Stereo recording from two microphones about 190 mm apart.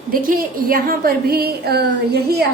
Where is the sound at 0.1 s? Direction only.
50° right (ahead or behind).